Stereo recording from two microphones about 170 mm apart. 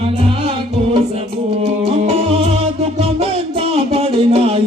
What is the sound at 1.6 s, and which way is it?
Music, 35° right (ahead or behind).